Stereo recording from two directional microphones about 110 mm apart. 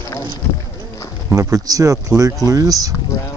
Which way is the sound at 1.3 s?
30° right (ahead or behind).